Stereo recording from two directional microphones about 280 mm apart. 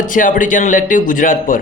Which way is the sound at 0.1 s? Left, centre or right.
Left.